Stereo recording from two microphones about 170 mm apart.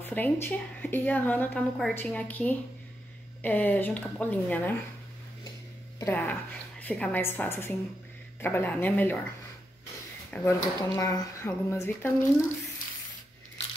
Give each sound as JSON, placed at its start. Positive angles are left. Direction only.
{"t": 0.0, "sound": "a woman's voice", "side_deg": 10}
{"t": 5.9, "sound": "a woman's voice", "side_deg": 15}
{"t": 10.3, "sound": "a woman's voice", "side_deg": 20}